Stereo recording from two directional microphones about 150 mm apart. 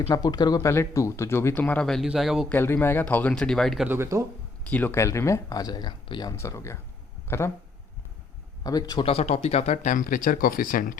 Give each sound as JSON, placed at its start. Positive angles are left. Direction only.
{"t": 0.1, "sound": "speech", "side_deg": 25}
{"t": 2.5, "sound": "speech", "side_deg": 15}
{"t": 3.8, "sound": "speech", "side_deg": -15}
{"t": 4.7, "sound": "speech", "side_deg": 15}
{"t": 8.6, "sound": "speech", "side_deg": 25}
{"t": 9.0, "sound": "speech", "side_deg": 45}